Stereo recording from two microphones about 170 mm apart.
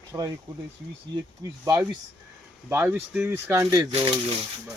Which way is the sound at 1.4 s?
20° right (ahead or behind).